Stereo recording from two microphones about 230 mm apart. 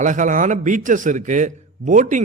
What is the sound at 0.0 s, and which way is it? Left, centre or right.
A man's voice, right.